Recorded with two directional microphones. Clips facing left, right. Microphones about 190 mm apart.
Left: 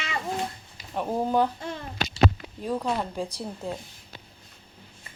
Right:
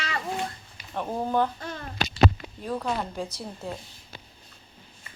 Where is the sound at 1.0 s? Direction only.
10° left (ahead or behind).